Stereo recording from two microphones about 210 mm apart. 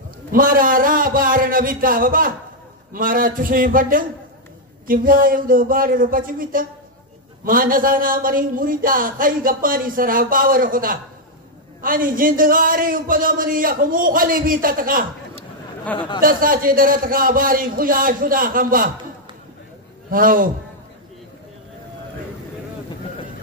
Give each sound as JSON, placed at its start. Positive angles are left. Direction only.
{"t": 0.3, "sound": "speech", "side_deg": -40}
{"t": 16.2, "sound": "a man's voice", "side_deg": -40}
{"t": 20.1, "sound": "speech", "side_deg": -40}